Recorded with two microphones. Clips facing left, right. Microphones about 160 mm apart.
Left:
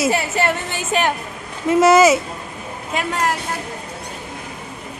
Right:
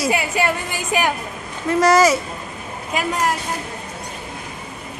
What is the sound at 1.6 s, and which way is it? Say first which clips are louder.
Speech: left 3 dB; 25° left (ahead or behind).